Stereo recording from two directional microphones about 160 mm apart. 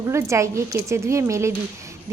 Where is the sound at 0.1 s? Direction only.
20° right (ahead or behind).